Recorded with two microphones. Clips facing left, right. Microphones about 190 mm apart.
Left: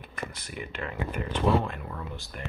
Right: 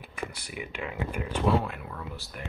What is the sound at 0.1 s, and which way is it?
Speech, 10° right (ahead or behind).